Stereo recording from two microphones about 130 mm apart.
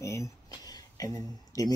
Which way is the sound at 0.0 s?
25° left (ahead or behind).